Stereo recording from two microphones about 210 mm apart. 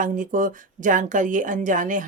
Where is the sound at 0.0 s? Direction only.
40° right (ahead or behind).